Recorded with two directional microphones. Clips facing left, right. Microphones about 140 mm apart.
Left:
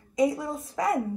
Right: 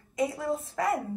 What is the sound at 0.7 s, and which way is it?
Speech, 20° left (ahead or behind).